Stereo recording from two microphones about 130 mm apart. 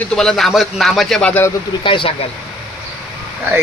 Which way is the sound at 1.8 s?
40° left (ahead or behind).